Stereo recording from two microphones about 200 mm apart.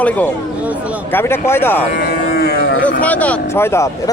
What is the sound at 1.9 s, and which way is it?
Livestock, 55° left (ahead or behind).